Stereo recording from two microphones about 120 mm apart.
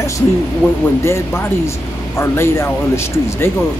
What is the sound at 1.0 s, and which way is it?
Speech, 20° left (ahead or behind).